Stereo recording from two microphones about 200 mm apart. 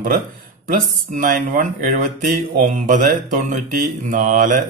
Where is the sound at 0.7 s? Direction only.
40° right (ahead or behind).